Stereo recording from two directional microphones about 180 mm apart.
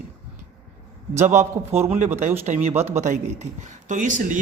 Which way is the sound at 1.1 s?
40° right (ahead or behind).